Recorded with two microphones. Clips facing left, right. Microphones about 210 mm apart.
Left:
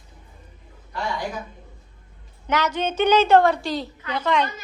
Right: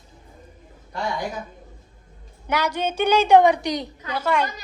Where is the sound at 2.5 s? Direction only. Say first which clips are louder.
Even; 10° right (ahead or behind).